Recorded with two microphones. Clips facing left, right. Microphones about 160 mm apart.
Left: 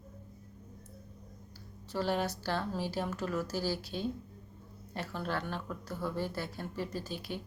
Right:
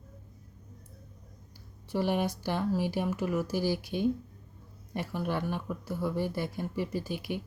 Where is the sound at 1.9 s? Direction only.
15° right (ahead or behind).